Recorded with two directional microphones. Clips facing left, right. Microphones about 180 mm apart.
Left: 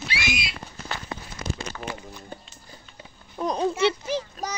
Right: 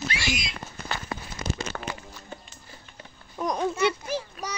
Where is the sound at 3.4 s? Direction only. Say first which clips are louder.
Left 2 dB; 25° left (ahead or behind).